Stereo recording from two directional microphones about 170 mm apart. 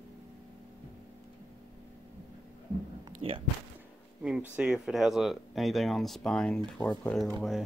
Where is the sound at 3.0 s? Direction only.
30° right (ahead or behind).